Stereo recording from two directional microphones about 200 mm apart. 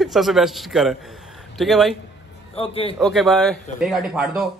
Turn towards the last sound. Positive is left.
turn(degrees=0)  # may be behind; listen again after turning